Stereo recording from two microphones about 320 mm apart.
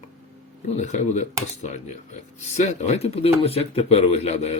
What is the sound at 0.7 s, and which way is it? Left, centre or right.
Speech, left.